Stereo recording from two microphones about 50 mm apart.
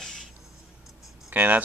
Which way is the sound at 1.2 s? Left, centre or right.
Right.